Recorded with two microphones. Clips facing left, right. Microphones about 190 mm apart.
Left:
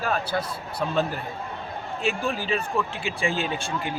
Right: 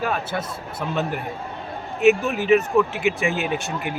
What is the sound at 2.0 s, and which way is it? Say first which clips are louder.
Speech: right 10 dB; 20° right (ahead or behind).